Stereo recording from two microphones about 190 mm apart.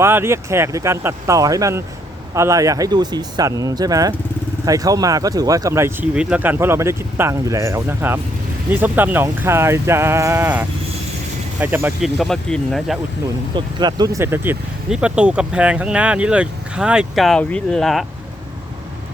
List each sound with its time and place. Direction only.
0.0 s speech: 15° right (ahead or behind)
12.0 s speech: centre (ahead or behind)
13.6 s speech: 20° right (ahead or behind); by 18.0 s centre (ahead or behind)